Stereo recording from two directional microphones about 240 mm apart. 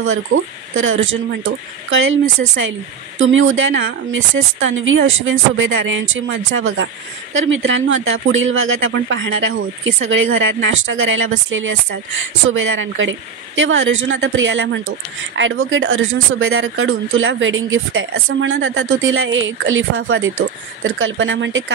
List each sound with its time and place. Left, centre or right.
0.0 s a woman's voice: right
3.2 s a woman's voice: right